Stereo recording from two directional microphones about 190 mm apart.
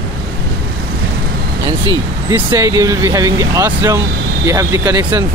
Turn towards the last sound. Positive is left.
turn(degrees=-20)  # may be behind; listen again after turning